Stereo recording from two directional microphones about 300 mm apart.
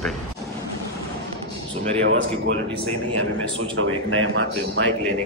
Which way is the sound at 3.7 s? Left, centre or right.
Right.